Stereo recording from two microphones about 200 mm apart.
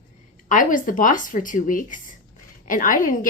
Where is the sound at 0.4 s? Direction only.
40° left (ahead or behind).